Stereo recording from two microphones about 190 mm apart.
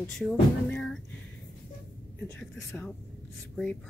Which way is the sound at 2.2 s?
10° left (ahead or behind).